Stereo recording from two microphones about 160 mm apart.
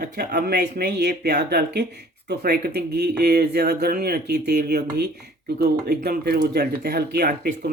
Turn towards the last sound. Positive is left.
turn(degrees=-90)